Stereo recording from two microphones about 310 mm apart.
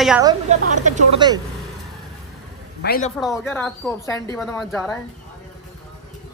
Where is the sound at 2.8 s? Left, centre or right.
Left.